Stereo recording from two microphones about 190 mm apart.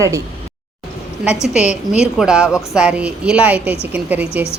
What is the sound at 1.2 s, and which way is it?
A woman's voice, 5° right (ahead or behind).